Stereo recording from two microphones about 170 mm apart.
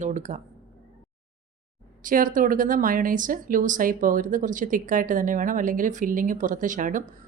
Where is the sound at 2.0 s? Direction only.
50° right (ahead or behind).